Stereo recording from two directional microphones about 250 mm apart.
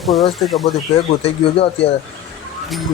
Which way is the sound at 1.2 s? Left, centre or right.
Left.